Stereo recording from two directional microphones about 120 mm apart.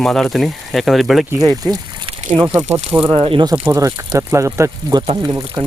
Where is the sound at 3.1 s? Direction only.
45° right (ahead or behind).